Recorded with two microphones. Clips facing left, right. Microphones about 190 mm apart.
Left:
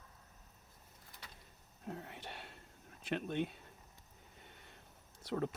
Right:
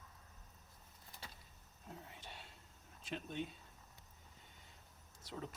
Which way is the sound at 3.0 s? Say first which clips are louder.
Left 7 dB; 65° left (ahead or behind).